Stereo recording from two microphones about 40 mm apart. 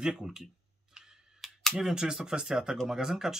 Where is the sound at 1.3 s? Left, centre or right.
Centre.